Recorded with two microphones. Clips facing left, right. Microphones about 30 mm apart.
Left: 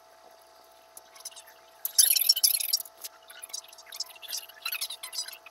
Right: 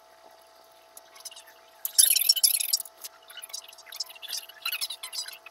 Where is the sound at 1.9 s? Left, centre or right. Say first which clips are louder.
Right 1 dB; right.